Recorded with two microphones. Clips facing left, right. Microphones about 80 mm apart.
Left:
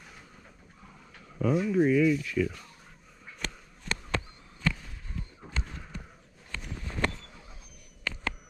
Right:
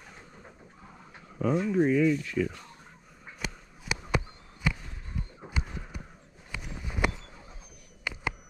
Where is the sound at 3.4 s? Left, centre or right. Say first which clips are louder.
Right 1 dB; centre.